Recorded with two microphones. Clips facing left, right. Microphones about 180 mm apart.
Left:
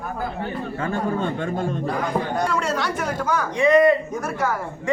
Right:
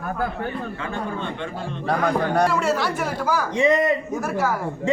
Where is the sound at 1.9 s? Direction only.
70° right (ahead or behind).